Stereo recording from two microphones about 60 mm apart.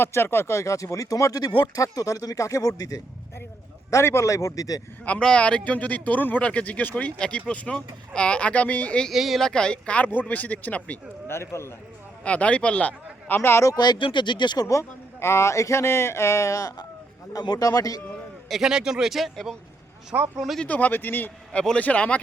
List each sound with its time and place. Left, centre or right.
0.0 s speech: left
3.9 s a man's voice: left
5.2 s speech: centre
9.1 s speech: centre
9.4 s speech: centre
11.3 s speech: left
12.2 s speech: left
14.6 s speech: left
17.3 s speech: left
18.6 s speech: centre
20.1 s speech: right
20.7 s a man's voice: left
21.5 s speech: centre